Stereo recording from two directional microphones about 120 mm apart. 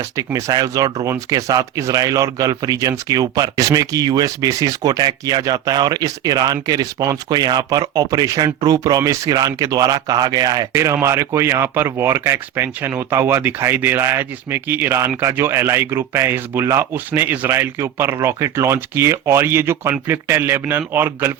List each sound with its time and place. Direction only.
0.3 s speech: 30° right (ahead or behind)